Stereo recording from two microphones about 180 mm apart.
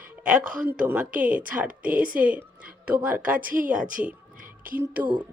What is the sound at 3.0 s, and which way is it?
Speech, 10° right (ahead or behind).